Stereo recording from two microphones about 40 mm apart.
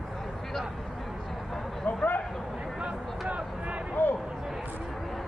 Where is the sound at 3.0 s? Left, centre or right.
Centre.